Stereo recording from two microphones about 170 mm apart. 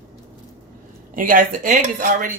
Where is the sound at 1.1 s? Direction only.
55° right (ahead or behind).